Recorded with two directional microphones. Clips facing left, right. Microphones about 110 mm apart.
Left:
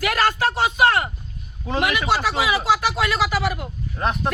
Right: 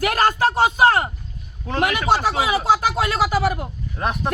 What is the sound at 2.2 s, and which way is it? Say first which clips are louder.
Speech: right 1 dB; 40° right (ahead or behind).